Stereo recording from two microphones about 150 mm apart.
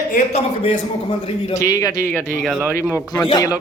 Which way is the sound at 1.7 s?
25° left (ahead or behind).